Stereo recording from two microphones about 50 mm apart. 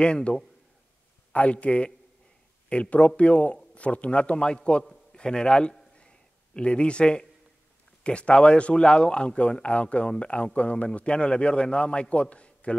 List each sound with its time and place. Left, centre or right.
0.0 s a man's voice: centre
5.9 s a sound: centre
8.0 s speech: left